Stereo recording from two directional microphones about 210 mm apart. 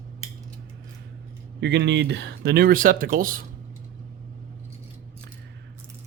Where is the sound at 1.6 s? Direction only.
55° right (ahead or behind); by 3.4 s 40° right (ahead or behind).